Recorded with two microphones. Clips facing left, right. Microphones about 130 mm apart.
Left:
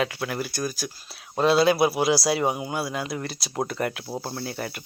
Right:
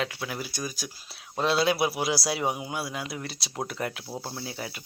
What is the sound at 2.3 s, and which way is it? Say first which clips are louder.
Speech: left 4 dB; centre (ahead or behind).